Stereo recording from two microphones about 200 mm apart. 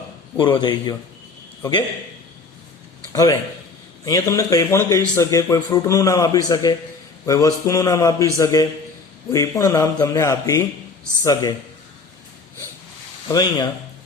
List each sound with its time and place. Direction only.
0.3 s a man's voice: 25° left (ahead or behind)
3.1 s a man's voice: 15° left (ahead or behind)
13.2 s a man's voice: 20° left (ahead or behind)